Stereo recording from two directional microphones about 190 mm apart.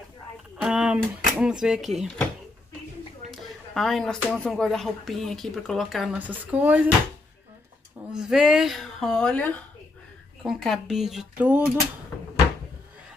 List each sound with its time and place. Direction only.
0.6 s speech: 5° right (ahead or behind)
3.3 s speech: centre (ahead or behind)
8.1 s speech: 5° right (ahead or behind)